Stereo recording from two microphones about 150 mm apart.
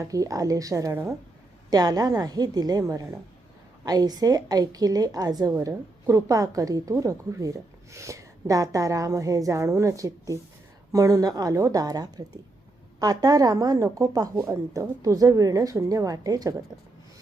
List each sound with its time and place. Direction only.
0.0 s a woman's voice: 25° right (ahead or behind)